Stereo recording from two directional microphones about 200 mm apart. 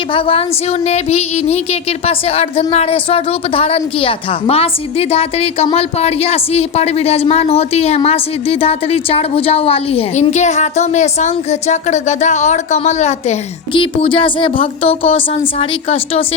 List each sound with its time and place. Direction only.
0.1 s a woman's voice: 25° left (ahead or behind)